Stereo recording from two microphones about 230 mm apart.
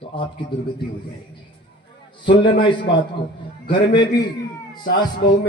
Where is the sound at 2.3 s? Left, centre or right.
Left.